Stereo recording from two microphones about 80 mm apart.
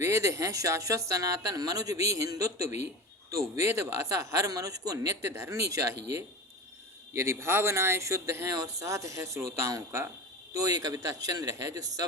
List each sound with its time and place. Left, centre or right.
0.0 s a woman's voice: right